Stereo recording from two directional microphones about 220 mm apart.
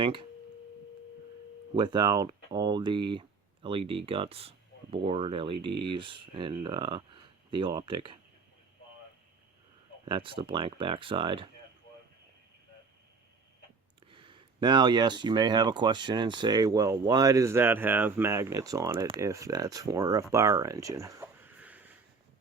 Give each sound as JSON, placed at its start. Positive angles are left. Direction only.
{"t": 0.0, "sound": "speech", "side_deg": -20}
{"t": 1.7, "sound": "speech", "side_deg": -20}
{"t": 10.1, "sound": "speech", "side_deg": -25}
{"t": 14.1, "sound": "speech", "side_deg": -25}
{"t": 20.3, "sound": "a sound", "side_deg": -15}